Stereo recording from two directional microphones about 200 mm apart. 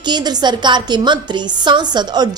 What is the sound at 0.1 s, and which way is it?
Speech, 20° right (ahead or behind).